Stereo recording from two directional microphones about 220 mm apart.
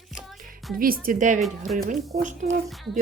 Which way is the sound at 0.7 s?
40° right (ahead or behind).